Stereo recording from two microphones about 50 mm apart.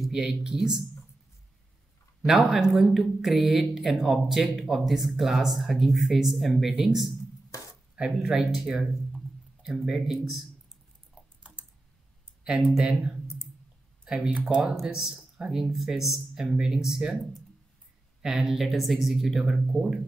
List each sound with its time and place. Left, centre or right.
0.1 s speech: centre
2.2 s speech: centre
7.9 s speech: centre
8.3 s speech: centre
8.6 s a sound: centre
9.8 s speech: centre
14.0 s speech: centre
14.8 s speech: centre